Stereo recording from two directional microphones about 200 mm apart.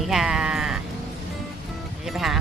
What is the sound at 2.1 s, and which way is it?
Speech, centre (ahead or behind).